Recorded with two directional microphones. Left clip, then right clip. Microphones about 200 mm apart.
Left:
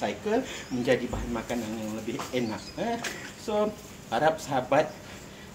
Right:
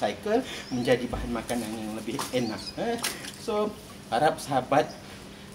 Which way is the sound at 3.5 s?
15° right (ahead or behind).